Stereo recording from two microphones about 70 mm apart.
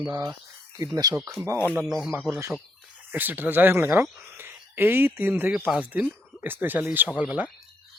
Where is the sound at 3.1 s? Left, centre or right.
Right.